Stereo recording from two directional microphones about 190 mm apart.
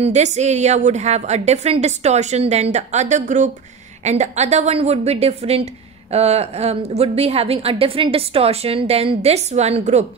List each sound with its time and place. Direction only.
0.0 s a woman's voice: 35° right (ahead or behind)